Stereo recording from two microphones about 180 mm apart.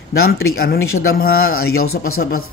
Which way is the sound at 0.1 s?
55° left (ahead or behind).